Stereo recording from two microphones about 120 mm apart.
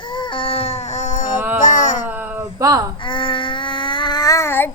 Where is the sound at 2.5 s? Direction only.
30° right (ahead or behind).